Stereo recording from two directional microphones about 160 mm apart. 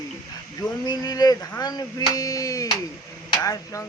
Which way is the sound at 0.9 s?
25° left (ahead or behind).